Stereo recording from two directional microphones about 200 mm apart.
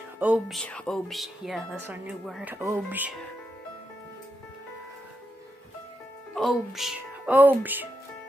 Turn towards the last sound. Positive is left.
turn(degrees=-10)  # may be behind; listen again after turning